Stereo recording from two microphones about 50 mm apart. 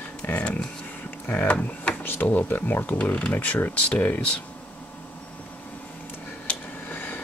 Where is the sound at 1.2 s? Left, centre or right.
Left.